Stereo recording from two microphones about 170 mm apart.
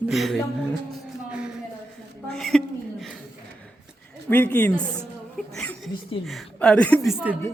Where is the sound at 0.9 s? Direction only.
5° right (ahead or behind).